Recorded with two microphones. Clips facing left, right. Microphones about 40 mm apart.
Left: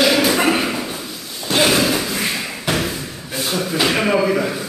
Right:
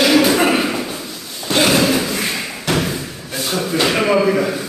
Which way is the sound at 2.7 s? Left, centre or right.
Centre.